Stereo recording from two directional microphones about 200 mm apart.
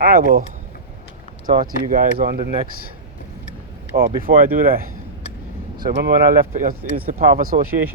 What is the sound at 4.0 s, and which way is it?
Speech, 45° right (ahead or behind).